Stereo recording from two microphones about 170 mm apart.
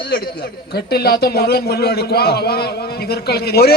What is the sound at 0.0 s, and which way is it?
A man's voice, 65° left (ahead or behind).